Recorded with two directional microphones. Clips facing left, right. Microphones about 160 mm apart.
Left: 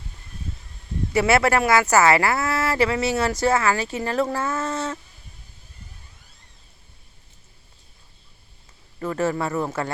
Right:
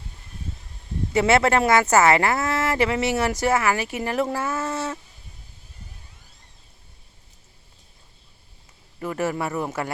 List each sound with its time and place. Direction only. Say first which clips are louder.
1.1 s speech: even; 25° right (ahead or behind)
9.0 s speech: left 2 dB; 15° right (ahead or behind)